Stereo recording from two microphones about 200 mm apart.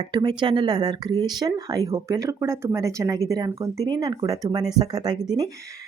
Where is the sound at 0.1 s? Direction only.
20° right (ahead or behind).